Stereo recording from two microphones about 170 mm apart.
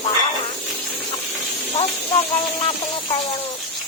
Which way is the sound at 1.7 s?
35° left (ahead or behind).